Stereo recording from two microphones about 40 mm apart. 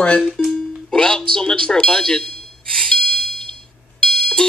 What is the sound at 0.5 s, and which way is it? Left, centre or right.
A man's voice, centre.